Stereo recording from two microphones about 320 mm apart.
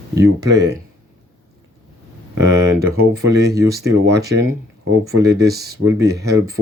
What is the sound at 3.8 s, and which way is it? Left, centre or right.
Speech, right.